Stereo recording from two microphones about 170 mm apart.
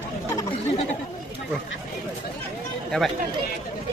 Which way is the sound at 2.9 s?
5° left (ahead or behind).